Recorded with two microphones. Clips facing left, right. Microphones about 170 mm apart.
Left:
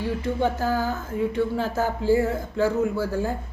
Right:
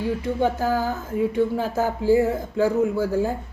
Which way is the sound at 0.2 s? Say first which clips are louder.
Right 2 dB; 15° right (ahead or behind).